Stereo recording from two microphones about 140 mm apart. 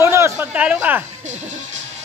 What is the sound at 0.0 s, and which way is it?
Speech, 15° right (ahead or behind).